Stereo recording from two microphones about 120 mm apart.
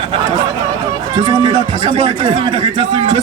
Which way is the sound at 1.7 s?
60° right (ahead or behind).